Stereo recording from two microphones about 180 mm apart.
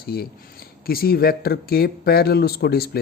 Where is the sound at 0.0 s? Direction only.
60° left (ahead or behind).